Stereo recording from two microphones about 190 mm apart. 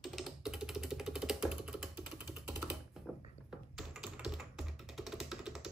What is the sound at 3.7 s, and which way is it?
Music, centre (ahead or behind).